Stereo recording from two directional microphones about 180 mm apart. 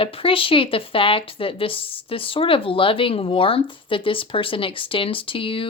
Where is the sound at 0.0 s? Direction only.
30° left (ahead or behind).